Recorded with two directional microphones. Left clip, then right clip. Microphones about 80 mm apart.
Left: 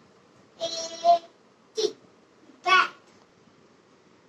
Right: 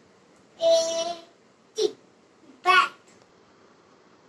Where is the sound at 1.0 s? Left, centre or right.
Right.